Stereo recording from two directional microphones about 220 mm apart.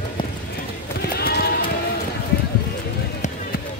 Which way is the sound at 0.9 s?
45° left (ahead or behind).